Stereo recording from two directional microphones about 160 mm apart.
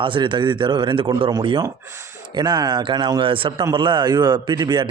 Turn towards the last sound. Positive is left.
turn(degrees=-25)  # may be behind; listen again after turning